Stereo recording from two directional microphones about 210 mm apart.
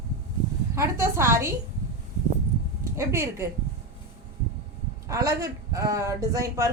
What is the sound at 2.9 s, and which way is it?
Speech, 15° right (ahead or behind).